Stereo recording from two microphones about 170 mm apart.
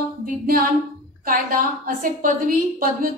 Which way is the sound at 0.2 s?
55° right (ahead or behind).